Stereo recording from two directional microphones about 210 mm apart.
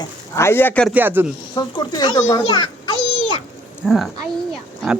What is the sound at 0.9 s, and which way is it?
Speech, 10° right (ahead or behind).